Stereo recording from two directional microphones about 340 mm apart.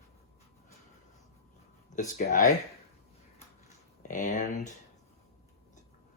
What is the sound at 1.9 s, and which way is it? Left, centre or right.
Speech, left.